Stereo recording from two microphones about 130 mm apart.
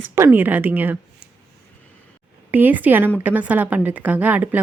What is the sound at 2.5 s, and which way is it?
Speech, 15° right (ahead or behind).